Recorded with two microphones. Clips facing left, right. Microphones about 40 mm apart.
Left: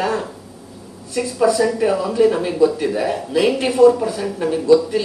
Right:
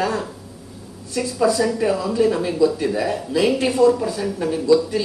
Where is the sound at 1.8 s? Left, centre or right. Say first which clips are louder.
Left 4 dB; left.